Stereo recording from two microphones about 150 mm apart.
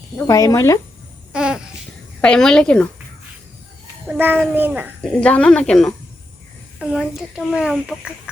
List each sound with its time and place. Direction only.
0.3 s speech: 25° left (ahead or behind)
1.3 s babbling: 5° right (ahead or behind)
2.2 s speech: 5° left (ahead or behind)
4.1 s a child's voice: 10° right (ahead or behind)
5.0 s speech: 10° left (ahead or behind)